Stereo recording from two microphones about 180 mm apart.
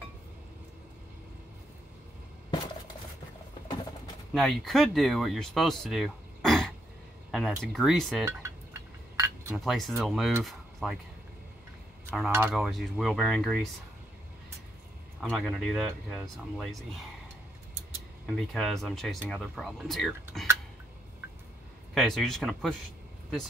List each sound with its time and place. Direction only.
4.3 s speech: centre (ahead or behind)
7.2 s a sound: centre (ahead or behind)
7.6 s speech: centre (ahead or behind)
9.1 s chink: 15° right (ahead or behind)
9.6 s speech: centre (ahead or behind)
12.3 s speech: 10° right (ahead or behind)
12.5 s speech: centre (ahead or behind)
15.1 s speech: centre (ahead or behind)
18.2 s speech: centre (ahead or behind)
21.9 s speech: centre (ahead or behind)